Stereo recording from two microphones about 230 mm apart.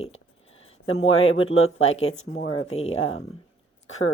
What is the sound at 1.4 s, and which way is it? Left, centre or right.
Speech, left.